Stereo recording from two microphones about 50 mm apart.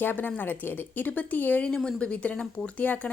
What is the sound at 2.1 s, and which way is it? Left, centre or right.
A woman's voice, left.